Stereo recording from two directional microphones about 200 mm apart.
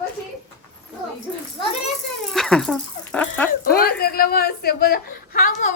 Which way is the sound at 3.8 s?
50° left (ahead or behind).